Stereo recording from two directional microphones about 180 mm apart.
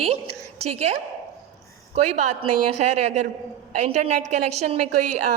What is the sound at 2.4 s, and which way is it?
A woman's voice, 35° right (ahead or behind).